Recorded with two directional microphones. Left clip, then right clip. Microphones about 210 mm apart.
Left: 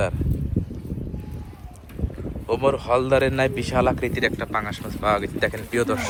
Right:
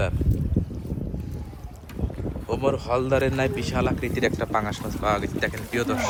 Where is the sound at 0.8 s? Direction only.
Centre (ahead or behind).